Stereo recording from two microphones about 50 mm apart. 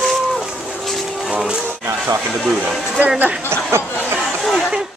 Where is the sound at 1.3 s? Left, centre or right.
Centre.